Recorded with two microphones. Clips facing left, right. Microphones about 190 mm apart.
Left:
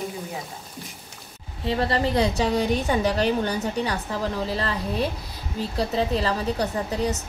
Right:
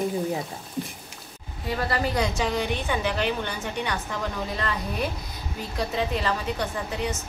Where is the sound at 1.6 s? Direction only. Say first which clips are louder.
Left 3 dB; 25° left (ahead or behind).